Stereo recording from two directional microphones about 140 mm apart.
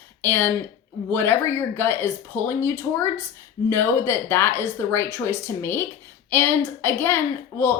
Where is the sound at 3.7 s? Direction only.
15° left (ahead or behind).